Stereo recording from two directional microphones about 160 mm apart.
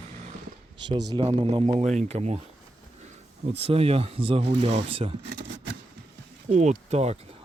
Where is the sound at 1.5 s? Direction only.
30° right (ahead or behind).